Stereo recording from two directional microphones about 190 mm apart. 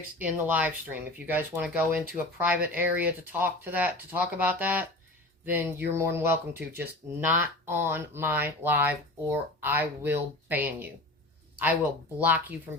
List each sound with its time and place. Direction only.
0.2 s speech: 10° right (ahead or behind)